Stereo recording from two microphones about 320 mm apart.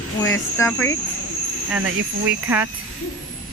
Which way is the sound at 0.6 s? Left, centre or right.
Centre.